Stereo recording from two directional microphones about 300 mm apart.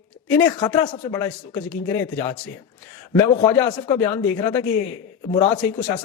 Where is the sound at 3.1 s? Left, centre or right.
Centre.